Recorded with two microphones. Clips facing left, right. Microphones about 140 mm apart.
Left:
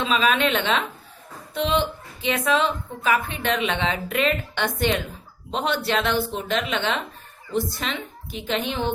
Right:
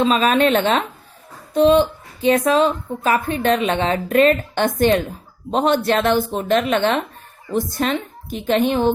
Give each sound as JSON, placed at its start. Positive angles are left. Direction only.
{"t": 0.0, "sound": "a woman's voice", "side_deg": -40}